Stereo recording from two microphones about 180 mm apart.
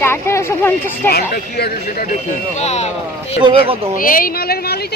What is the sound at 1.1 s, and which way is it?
Speech, 60° left (ahead or behind).